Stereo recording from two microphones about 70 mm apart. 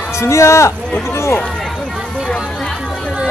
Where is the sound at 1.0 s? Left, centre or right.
Left.